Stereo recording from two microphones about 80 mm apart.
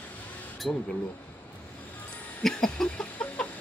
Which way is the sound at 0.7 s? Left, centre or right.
Centre.